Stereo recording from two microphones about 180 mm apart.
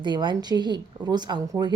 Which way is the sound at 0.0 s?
25° right (ahead or behind).